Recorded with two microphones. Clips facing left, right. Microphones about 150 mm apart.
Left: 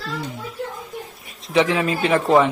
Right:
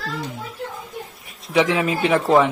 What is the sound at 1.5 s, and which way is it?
Speech, 10° right (ahead or behind).